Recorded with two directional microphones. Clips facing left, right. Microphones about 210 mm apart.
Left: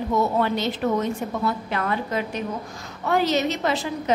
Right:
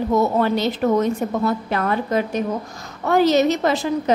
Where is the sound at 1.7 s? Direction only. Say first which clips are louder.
Right 4 dB; 45° right (ahead or behind).